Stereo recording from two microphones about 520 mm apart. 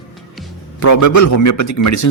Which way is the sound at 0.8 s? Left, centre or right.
Left.